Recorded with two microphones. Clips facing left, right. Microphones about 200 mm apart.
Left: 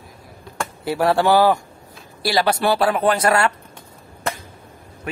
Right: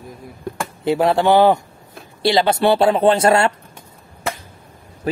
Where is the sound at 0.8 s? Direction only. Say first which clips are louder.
Right 2 dB; 20° right (ahead or behind).